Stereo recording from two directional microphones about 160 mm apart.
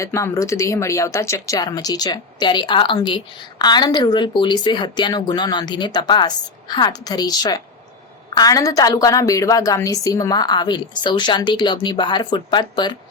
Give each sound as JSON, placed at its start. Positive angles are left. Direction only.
{"t": 0.0, "sound": "a woman's voice", "side_deg": 15}